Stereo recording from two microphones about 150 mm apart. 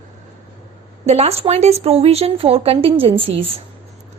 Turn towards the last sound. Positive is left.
turn(degrees=-40)  # may be behind; listen again after turning